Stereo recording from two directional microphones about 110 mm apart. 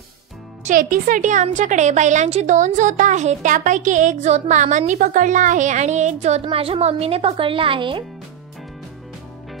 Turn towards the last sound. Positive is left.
turn(degrees=-50)  # may be behind; listen again after turning